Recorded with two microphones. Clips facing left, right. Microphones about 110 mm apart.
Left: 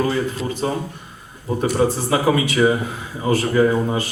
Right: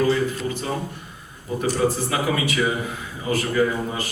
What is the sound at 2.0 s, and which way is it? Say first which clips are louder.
A man's voice: left 5 dB; 35° left (ahead or behind).